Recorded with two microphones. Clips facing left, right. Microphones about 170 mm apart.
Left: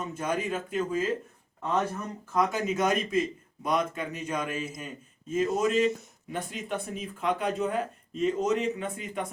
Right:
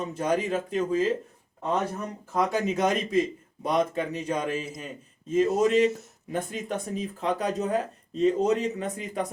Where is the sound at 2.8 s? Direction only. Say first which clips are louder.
Right 2 dB; 35° right (ahead or behind).